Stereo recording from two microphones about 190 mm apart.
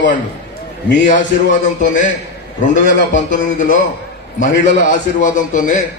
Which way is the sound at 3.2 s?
40° left (ahead or behind).